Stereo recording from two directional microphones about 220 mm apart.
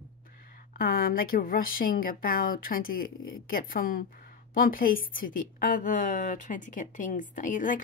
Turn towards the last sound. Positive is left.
turn(degrees=35)  # may be behind; listen again after turning